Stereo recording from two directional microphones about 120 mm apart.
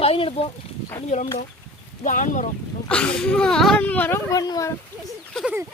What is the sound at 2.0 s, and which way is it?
Speech, 90° left.